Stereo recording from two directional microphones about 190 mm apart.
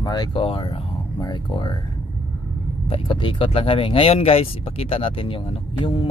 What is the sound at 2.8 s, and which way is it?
Speech, 30° left (ahead or behind).